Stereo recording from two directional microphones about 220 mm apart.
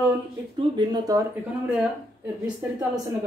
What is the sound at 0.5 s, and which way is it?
Speech, 20° right (ahead or behind).